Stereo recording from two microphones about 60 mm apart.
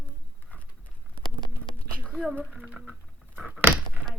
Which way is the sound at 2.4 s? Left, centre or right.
Right.